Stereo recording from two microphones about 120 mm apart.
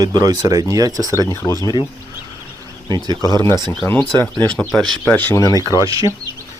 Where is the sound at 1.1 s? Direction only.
25° left (ahead or behind).